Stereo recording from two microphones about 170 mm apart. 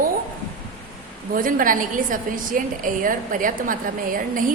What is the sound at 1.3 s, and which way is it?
A woman's voice, 55° right (ahead or behind).